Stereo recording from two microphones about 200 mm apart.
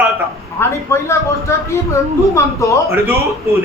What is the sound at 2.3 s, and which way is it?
Speech, 15° left (ahead or behind).